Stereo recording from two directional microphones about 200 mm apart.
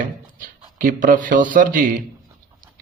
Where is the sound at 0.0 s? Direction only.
45° right (ahead or behind).